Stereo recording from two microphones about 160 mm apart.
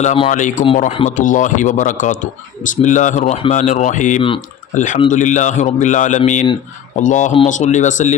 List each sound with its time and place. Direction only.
0.0 s a man's voice: 45° left (ahead or behind)
0.9 s speech: 40° left (ahead or behind)
1.1 s a man's voice: 55° left (ahead or behind)